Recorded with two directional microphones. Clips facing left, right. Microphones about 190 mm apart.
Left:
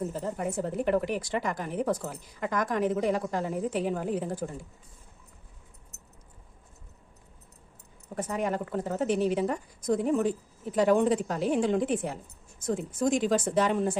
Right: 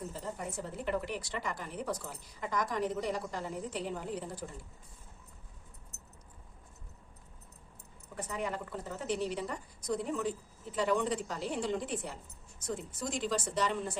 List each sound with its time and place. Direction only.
0.3 s a woman's voice: 55° left (ahead or behind)
8.1 s a woman's voice: 50° left (ahead or behind)